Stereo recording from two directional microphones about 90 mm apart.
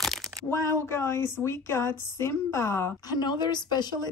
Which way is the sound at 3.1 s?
55° left (ahead or behind).